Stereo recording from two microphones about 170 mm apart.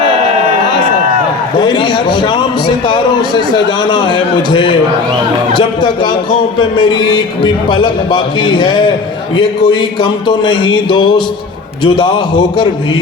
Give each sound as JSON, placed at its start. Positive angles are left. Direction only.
{"t": 1.5, "sound": "speech", "side_deg": 25}